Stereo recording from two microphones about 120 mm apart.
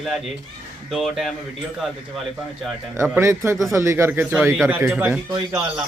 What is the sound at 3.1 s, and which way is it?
A man's voice, 20° right (ahead or behind).